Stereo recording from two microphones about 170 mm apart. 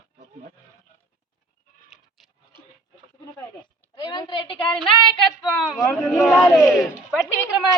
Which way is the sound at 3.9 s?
30° left (ahead or behind).